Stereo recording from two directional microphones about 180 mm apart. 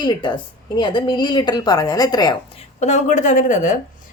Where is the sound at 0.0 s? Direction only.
25° left (ahead or behind).